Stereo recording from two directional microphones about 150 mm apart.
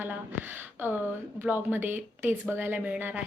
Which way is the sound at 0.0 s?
15° right (ahead or behind).